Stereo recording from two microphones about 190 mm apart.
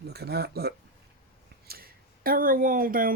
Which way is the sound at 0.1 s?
55° right (ahead or behind).